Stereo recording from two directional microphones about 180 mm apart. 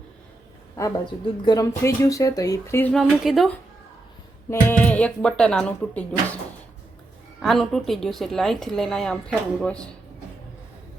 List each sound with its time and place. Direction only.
0.8 s speech: 20° left (ahead or behind)
7.3 s speech: centre (ahead or behind)